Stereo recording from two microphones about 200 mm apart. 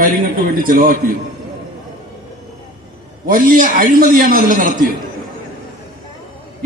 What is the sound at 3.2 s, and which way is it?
A man's voice, 45° right (ahead or behind).